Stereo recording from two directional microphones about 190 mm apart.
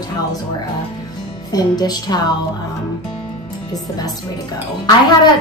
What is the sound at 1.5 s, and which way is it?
Speech, 20° left (ahead or behind).